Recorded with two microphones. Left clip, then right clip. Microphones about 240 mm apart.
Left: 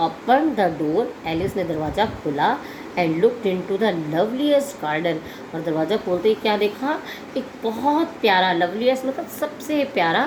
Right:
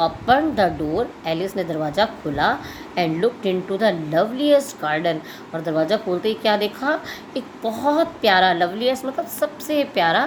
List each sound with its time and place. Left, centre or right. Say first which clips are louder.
0.0 s a woman's voice: right 1 dB; right